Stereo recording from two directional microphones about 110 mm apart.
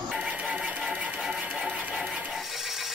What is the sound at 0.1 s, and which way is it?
Music, 10° right (ahead or behind).